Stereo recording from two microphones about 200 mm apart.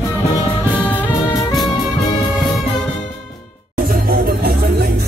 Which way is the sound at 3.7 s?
45° right (ahead or behind).